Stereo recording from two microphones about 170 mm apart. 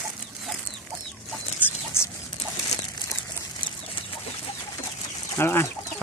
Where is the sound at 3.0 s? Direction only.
20° left (ahead or behind).